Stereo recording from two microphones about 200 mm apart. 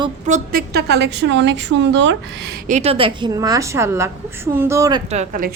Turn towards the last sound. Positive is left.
turn(degrees=-40)  # may be behind; listen again after turning